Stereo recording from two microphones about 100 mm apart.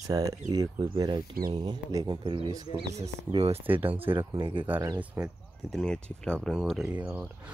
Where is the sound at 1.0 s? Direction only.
50° right (ahead or behind).